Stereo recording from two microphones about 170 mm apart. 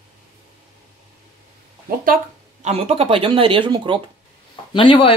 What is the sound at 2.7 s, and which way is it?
Speech, 35° right (ahead or behind).